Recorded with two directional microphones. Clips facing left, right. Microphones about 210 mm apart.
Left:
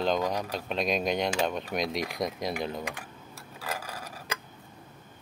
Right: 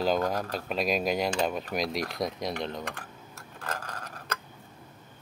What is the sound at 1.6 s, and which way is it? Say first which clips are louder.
Typing: even; centre (ahead or behind).